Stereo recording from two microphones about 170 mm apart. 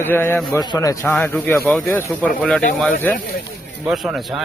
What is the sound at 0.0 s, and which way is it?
Speech, 10° left (ahead or behind).